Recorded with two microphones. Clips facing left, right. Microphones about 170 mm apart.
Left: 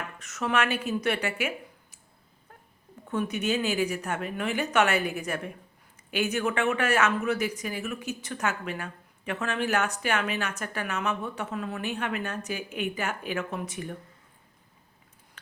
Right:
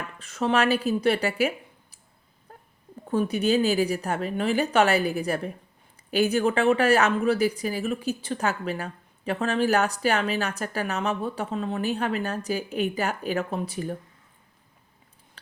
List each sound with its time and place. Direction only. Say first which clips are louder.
0.2 s a woman's voice: right 4 dB; 30° right (ahead or behind)
2.5 s wail: right 5 dB; 35° right (ahead or behind)
3.1 s speech: right 5 dB; 35° right (ahead or behind)